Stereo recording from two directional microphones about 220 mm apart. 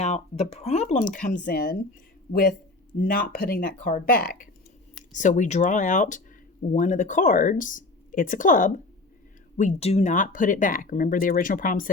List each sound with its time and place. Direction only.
0.0 s speech: 30° left (ahead or behind)